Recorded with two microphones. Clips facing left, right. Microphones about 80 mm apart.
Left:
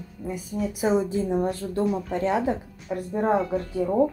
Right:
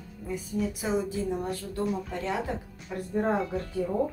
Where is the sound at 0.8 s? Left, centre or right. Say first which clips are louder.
Left 10 dB; left.